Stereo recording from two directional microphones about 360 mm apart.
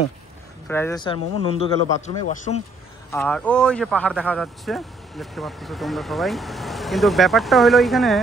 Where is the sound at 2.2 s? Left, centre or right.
Centre.